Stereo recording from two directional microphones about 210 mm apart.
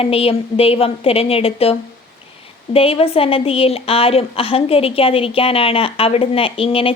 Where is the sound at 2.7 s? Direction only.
25° left (ahead or behind).